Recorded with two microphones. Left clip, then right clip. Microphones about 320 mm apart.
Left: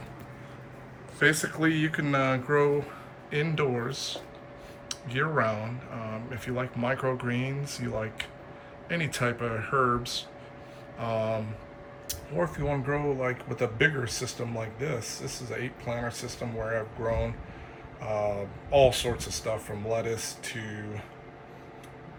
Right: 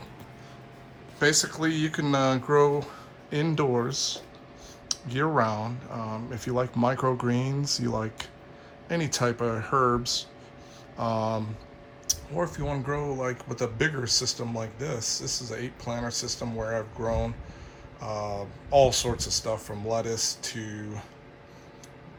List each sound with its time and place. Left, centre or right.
1.6 s speech: centre
18.1 s a sound: right
18.7 s speech: centre